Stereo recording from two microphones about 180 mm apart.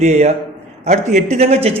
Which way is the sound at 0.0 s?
40° right (ahead or behind).